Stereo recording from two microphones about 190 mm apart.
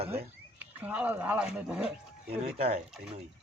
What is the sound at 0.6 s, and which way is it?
Speech, 10° right (ahead or behind).